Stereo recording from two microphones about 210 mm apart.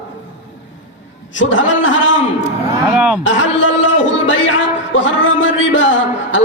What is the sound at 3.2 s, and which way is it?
A man's voice, 65° left (ahead or behind).